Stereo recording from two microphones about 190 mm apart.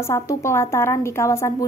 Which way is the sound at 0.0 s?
15° left (ahead or behind).